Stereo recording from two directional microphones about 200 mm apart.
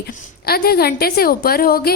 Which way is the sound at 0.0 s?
50° left (ahead or behind).